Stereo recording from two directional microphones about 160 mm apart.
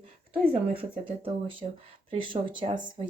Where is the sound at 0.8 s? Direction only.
35° right (ahead or behind).